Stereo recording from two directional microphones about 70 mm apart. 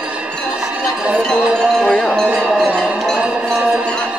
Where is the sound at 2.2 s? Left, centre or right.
Centre.